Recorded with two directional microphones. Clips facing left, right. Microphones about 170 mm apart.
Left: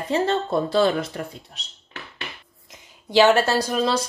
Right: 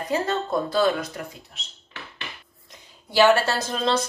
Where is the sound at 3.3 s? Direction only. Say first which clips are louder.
Left 4 dB; 15° left (ahead or behind).